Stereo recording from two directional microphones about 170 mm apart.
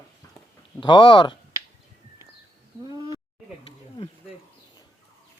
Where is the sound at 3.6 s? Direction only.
30° left (ahead or behind).